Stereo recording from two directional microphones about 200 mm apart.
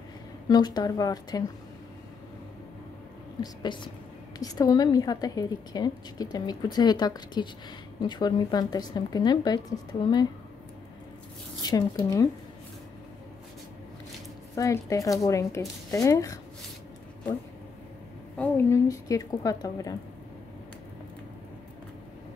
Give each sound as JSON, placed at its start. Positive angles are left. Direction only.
{"t": 0.5, "sound": "a woman's voice", "side_deg": 20}
{"t": 3.6, "sound": "a woman's voice", "side_deg": 25}
{"t": 11.6, "sound": "a woman's voice", "side_deg": 20}
{"t": 14.5, "sound": "a woman's voice", "side_deg": 15}
{"t": 18.4, "sound": "a woman's voice", "side_deg": 10}